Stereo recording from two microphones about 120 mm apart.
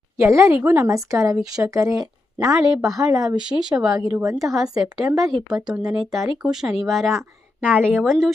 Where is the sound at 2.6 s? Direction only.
5° right (ahead or behind).